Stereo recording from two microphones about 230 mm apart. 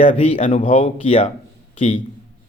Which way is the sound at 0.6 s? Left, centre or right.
Left.